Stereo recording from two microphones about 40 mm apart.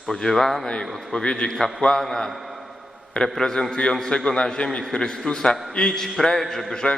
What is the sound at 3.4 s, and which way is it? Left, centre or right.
A man's voice, centre.